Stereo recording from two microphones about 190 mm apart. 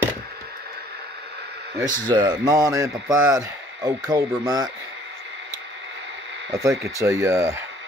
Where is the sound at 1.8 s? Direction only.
20° right (ahead or behind).